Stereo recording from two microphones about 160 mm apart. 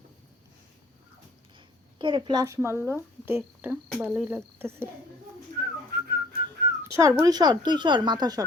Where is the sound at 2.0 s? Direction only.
30° right (ahead or behind).